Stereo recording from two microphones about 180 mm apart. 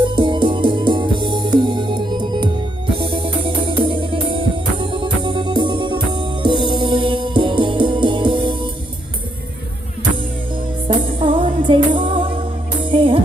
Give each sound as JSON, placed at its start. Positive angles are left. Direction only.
{"t": 0.0, "sound": "music", "side_deg": -25}
{"t": 10.8, "sound": "music", "side_deg": -30}